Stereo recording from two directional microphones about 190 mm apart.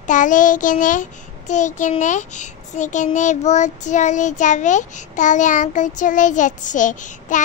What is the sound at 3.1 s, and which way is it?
A child's voice, 40° left (ahead or behind).